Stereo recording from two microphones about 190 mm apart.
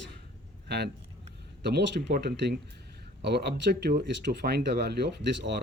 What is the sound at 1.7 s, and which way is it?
Speech, 60° right (ahead or behind).